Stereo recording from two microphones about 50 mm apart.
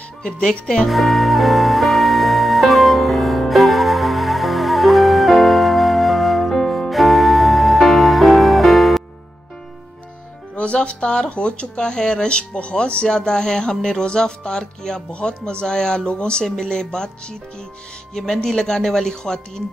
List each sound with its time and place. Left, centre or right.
0.2 s speech: centre
0.8 s music: centre
10.5 s speech: left